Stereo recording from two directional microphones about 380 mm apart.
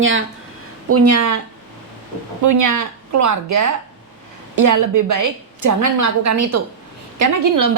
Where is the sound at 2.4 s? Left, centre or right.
Right.